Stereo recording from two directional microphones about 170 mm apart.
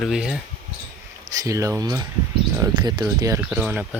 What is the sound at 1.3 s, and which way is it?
Speech, 20° right (ahead or behind).